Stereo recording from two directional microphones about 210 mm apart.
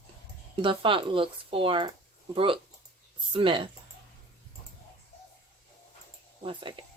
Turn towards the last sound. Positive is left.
turn(degrees=-25)  # may be behind; listen again after turning